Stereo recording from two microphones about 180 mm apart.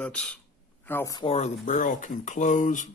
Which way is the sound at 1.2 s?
30° left (ahead or behind).